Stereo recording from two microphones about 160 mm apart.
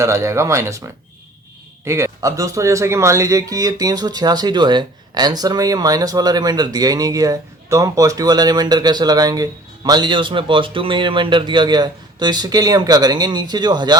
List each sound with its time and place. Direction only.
0.0 s speech: 20° right (ahead or behind)